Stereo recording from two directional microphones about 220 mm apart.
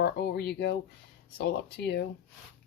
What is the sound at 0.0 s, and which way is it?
Speech, 45° left (ahead or behind).